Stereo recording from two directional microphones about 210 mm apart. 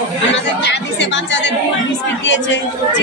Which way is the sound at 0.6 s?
55° left (ahead or behind).